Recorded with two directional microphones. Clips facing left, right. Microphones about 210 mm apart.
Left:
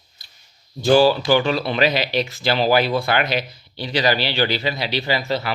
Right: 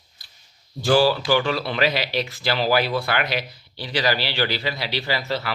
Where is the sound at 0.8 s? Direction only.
20° left (ahead or behind).